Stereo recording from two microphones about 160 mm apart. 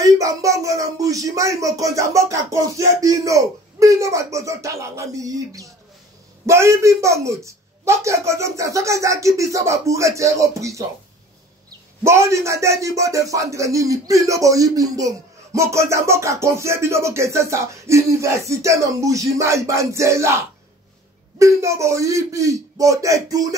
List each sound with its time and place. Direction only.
0.0 s speech: 20° right (ahead or behind)
12.0 s speech: 15° right (ahead or behind)